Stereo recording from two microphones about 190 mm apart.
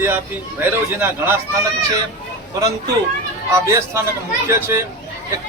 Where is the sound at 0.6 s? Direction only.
10° right (ahead or behind).